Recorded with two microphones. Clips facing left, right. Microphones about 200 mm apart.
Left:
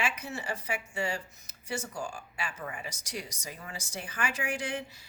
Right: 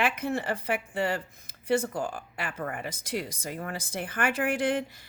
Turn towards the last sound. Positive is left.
turn(degrees=-55)  # may be behind; listen again after turning